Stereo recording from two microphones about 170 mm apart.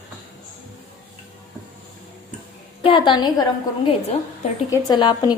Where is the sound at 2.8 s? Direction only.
30° left (ahead or behind).